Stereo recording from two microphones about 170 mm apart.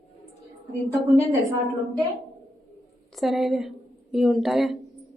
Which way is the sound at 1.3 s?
20° right (ahead or behind).